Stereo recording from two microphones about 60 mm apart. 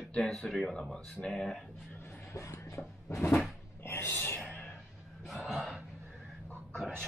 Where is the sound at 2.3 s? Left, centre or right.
Left.